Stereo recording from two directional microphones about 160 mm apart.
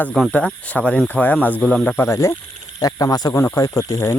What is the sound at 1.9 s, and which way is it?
Speech, 15° left (ahead or behind).